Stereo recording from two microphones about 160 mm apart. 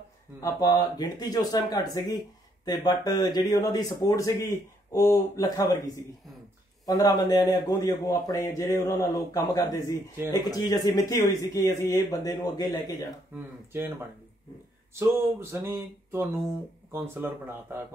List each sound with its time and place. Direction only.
0.4 s speech: 20° left (ahead or behind)
6.9 s speech: 25° left (ahead or behind)
13.4 s speech: 15° right (ahead or behind)
15.6 s speech: 15° right (ahead or behind)